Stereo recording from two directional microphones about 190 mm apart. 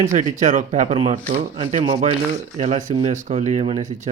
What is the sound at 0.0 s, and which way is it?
Speech, 40° right (ahead or behind).